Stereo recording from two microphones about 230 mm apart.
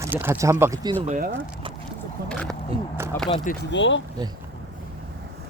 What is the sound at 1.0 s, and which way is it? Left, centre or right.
Speech, right.